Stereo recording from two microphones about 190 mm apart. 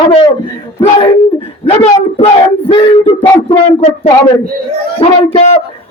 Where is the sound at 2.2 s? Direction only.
25° left (ahead or behind).